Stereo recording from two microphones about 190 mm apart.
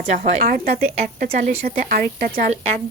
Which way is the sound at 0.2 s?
40° right (ahead or behind).